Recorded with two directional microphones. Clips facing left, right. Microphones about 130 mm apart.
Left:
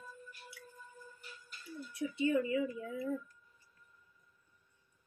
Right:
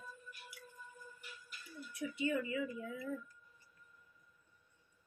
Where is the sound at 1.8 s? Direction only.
30° left (ahead or behind).